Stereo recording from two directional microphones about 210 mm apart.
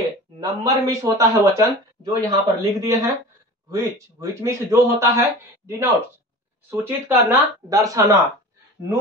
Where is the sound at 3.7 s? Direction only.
15° right (ahead or behind).